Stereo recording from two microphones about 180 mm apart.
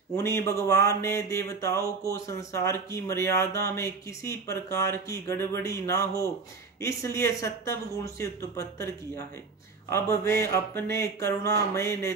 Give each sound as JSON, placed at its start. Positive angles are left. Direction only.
{"t": 0.1, "sound": "speech", "side_deg": 15}